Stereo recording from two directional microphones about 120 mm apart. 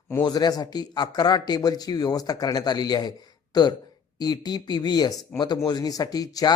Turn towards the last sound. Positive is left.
turn(degrees=30)  # may be behind; listen again after turning